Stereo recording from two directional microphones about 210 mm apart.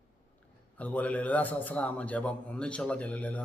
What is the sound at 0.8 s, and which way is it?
A man's voice, 5° left (ahead or behind).